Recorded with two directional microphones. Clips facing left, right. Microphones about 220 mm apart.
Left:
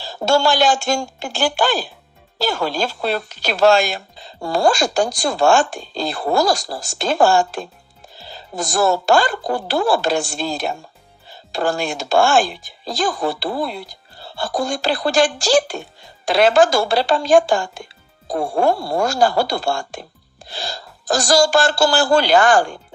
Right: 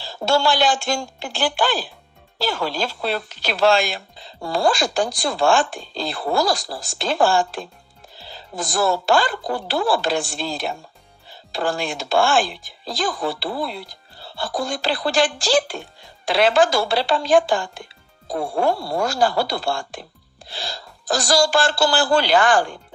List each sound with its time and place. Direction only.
0.0 s speech: 45° left (ahead or behind)